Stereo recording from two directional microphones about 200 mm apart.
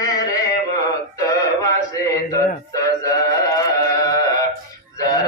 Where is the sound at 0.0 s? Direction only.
20° left (ahead or behind).